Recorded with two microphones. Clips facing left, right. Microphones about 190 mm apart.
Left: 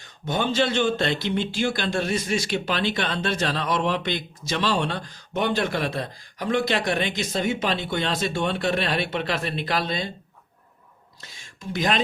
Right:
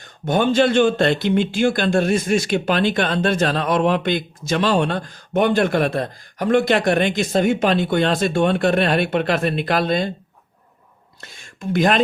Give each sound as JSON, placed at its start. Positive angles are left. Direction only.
{"t": 0.0, "sound": "speech", "side_deg": -50}
{"t": 11.2, "sound": "speech", "side_deg": -55}